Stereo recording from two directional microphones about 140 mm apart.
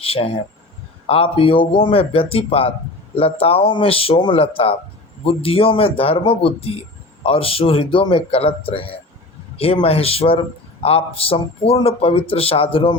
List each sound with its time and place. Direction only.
0.0 s a man's voice: 45° left (ahead or behind)